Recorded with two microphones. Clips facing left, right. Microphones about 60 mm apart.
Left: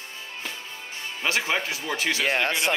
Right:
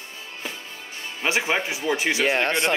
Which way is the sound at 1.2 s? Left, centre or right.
Centre.